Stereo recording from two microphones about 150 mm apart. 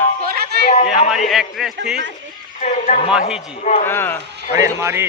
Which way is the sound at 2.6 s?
55° left (ahead or behind).